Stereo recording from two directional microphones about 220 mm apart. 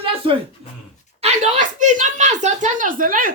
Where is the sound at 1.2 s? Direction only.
30° right (ahead or behind).